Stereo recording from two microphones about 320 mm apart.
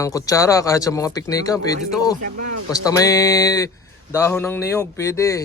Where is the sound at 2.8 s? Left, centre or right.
Centre.